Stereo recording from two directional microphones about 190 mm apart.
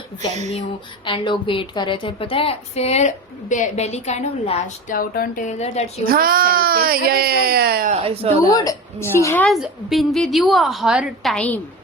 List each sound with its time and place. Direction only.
1.0 s a woman's voice: 25° left (ahead or behind)
6.1 s speech: 50° right (ahead or behind)
8.0 s speech: 30° right (ahead or behind)
8.4 s a woman's voice: 20° left (ahead or behind)
9.5 s a woman's voice: centre (ahead or behind)